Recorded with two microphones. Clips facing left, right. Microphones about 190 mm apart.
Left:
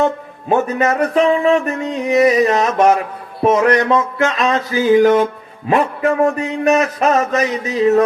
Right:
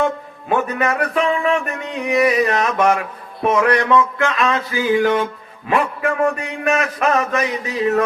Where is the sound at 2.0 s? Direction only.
25° left (ahead or behind).